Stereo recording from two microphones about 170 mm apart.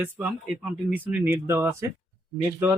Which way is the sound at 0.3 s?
5° right (ahead or behind).